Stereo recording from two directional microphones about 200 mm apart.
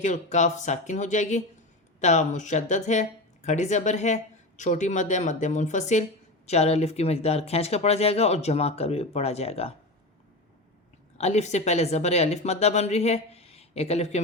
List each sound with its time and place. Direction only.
0.0 s speech: 35° left (ahead or behind)
11.2 s speech: 35° left (ahead or behind)